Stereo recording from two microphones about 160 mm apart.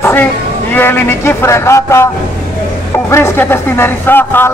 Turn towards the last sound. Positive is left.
turn(degrees=15)  # may be behind; listen again after turning